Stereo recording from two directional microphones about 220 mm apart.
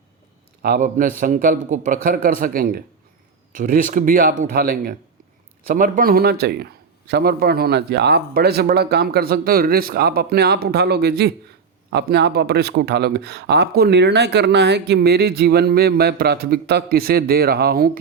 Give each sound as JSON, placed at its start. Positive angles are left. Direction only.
{"t": 0.6, "sound": "speech", "side_deg": -40}